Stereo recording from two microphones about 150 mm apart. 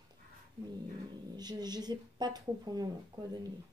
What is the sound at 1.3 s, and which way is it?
A woman's voice, 25° right (ahead or behind).